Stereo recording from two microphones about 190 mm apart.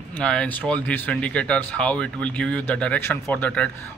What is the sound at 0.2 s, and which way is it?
Speech, 5° left (ahead or behind).